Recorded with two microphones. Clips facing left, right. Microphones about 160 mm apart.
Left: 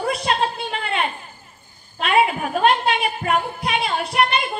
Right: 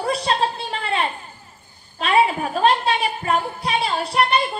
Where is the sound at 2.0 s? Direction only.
35° right (ahead or behind).